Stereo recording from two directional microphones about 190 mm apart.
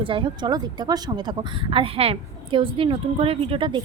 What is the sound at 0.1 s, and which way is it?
A woman's voice, 25° right (ahead or behind).